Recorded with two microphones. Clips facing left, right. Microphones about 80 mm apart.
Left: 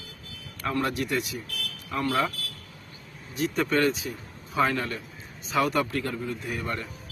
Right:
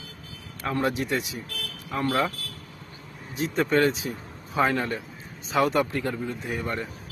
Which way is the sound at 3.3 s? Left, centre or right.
Right.